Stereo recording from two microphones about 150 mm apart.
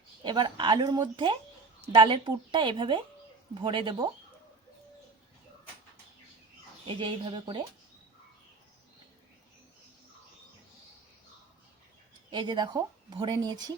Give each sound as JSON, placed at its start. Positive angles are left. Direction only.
{"t": 0.2, "sound": "speech", "side_deg": -30}
{"t": 6.8, "sound": "speech", "side_deg": -35}
{"t": 12.3, "sound": "speech", "side_deg": -30}